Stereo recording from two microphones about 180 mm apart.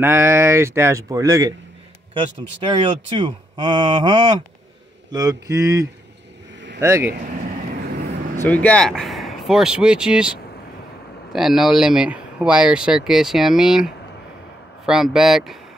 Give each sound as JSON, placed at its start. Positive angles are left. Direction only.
{"t": 0.0, "sound": "speech", "side_deg": -15}
{"t": 8.5, "sound": "speech", "side_deg": 5}
{"t": 11.3, "sound": "speech", "side_deg": 0}